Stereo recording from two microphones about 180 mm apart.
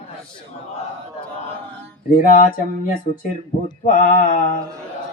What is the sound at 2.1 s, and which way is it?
Speech, 50° left (ahead or behind).